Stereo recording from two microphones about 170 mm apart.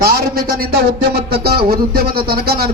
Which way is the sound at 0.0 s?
60° right (ahead or behind).